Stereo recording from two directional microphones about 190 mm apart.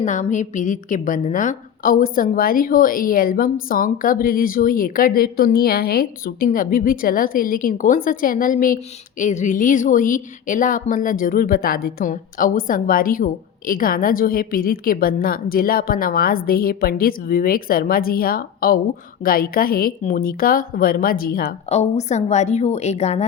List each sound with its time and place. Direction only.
0.0 s a woman's voice: 40° left (ahead or behind)
21.7 s a woman's voice: 35° left (ahead or behind)